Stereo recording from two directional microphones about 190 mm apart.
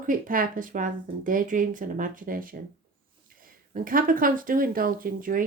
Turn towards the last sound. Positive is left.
turn(degrees=-45)  # may be behind; listen again after turning